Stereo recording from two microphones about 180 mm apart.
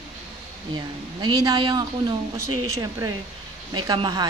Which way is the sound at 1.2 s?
20° right (ahead or behind).